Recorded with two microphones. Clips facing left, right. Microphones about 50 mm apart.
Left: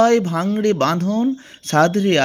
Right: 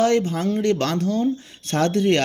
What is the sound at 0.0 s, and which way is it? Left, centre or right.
Speech, left.